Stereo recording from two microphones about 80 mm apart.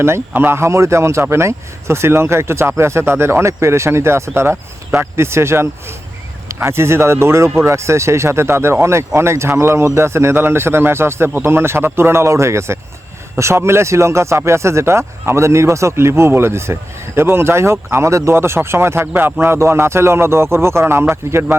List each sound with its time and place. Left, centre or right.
0.0 s speech: right